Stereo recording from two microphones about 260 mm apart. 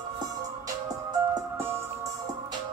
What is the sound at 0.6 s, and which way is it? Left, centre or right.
Music, centre.